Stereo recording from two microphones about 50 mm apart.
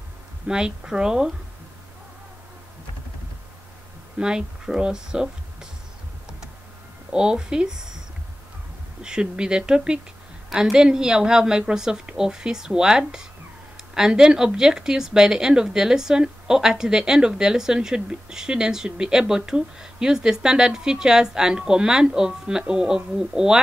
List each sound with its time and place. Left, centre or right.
0.5 s speech: centre
4.2 s speech: centre
7.1 s speech: centre
9.0 s speech: centre